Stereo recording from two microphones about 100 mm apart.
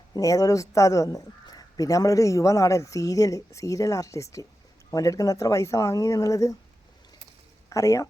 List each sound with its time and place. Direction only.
0.1 s speech: 35° left (ahead or behind)
7.7 s speech: 30° left (ahead or behind)